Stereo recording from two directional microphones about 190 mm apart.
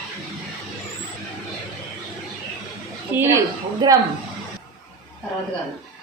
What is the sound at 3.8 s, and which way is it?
Speech, 20° right (ahead or behind).